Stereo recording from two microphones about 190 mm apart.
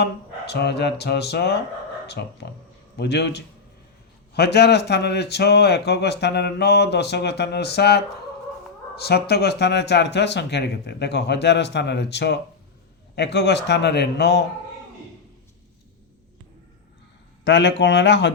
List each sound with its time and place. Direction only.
0.0 s speech: 60° left (ahead or behind)
17.4 s a man's voice: 70° left (ahead or behind)